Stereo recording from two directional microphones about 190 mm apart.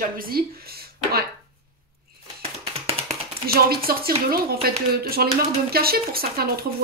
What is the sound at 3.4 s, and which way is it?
Speech, 55° right (ahead or behind).